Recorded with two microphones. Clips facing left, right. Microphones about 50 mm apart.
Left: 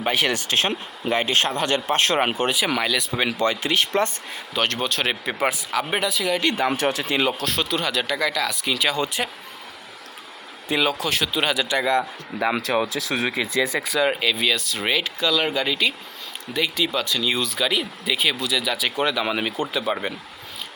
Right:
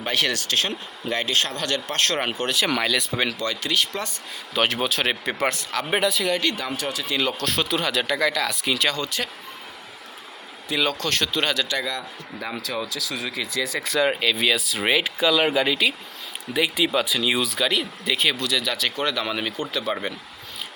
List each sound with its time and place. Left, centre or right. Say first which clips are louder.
0.0 s speech: left 2 dB; centre
2.6 s speech: even; centre
3.3 s speech: left 3 dB; left
4.5 s speech: right 1 dB; centre
6.4 s speech: left 4 dB; left
6.7 s speech: left 5 dB; left
7.3 s speech: even; centre
9.0 s speech: left 3 dB; centre
10.8 s speech: left 1 dB; centre
12.5 s speech: left 7 dB; left
13.3 s speech: left 4 dB; left
13.7 s speech: left 1 dB; centre
17.5 s speech: even; centre